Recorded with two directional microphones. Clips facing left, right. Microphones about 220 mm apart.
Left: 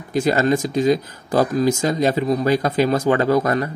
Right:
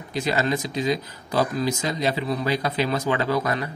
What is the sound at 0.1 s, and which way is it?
Speech, 45° left (ahead or behind).